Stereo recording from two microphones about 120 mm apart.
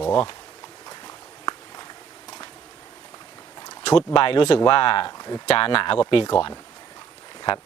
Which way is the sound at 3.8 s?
45° left (ahead or behind).